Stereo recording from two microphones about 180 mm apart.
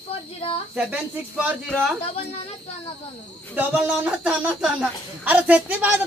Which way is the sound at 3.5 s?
5° right (ahead or behind).